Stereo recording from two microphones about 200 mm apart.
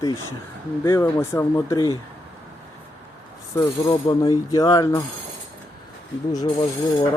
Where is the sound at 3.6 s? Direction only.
20° left (ahead or behind).